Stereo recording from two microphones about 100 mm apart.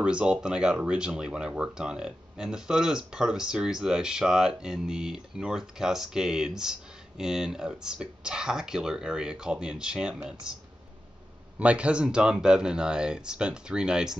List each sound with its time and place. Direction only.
0.0 s speech: 10° right (ahead or behind)
11.6 s speech: 10° right (ahead or behind)